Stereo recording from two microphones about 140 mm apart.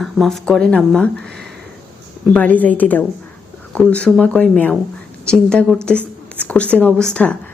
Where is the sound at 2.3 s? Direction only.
10° left (ahead or behind).